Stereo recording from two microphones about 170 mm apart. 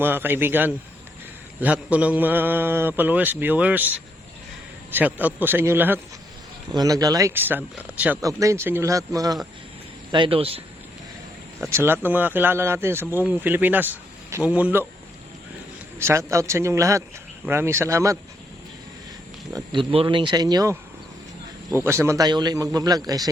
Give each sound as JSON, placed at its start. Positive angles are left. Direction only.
{"t": 0.0, "sound": "speech", "side_deg": -10}
{"t": 8.2, "sound": "a man's voice", "side_deg": -20}
{"t": 11.7, "sound": "speech", "side_deg": -15}
{"t": 16.0, "sound": "speech", "side_deg": -15}
{"t": 19.5, "sound": "a man's voice", "side_deg": -30}